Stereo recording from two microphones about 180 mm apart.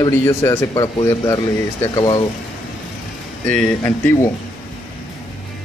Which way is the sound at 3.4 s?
5° left (ahead or behind).